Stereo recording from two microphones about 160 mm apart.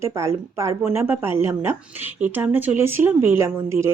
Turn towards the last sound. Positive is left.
turn(degrees=-15)  # may be behind; listen again after turning